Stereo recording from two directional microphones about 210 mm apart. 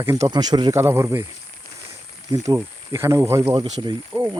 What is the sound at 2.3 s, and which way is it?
Speech, 15° right (ahead or behind).